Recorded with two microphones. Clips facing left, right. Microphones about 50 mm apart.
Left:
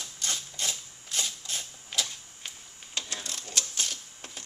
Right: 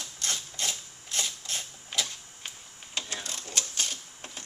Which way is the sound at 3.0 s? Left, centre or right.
Centre.